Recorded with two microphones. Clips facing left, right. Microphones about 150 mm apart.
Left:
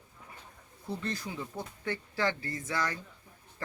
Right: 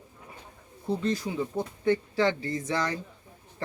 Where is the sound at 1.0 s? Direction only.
20° right (ahead or behind).